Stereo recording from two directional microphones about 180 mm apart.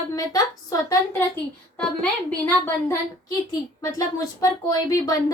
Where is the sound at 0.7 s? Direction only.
20° left (ahead or behind).